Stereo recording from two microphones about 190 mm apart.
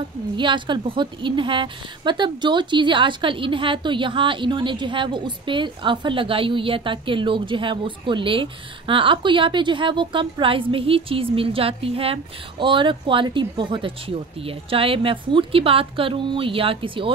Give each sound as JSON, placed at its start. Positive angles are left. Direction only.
{"t": 0.4, "sound": "a woman's voice", "side_deg": -25}